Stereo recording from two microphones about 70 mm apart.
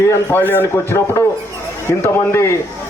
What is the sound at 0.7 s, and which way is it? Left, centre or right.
A man's voice, left.